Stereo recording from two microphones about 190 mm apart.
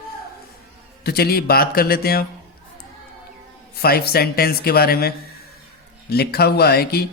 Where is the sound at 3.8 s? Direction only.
55° left (ahead or behind).